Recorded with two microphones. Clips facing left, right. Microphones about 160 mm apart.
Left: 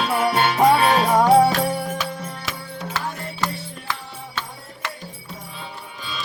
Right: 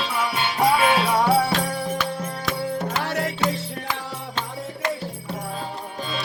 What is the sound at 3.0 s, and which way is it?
Music, 85° right.